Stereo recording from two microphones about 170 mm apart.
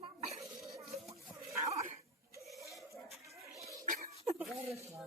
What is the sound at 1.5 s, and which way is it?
Dog, 20° right (ahead or behind).